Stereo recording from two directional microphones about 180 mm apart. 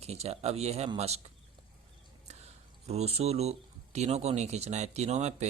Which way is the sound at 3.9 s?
35° right (ahead or behind).